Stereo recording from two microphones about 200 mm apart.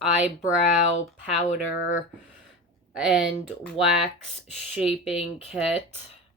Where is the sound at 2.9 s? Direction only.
Centre (ahead or behind).